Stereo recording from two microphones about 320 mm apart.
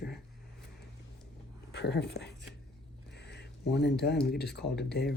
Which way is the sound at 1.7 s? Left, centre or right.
Left.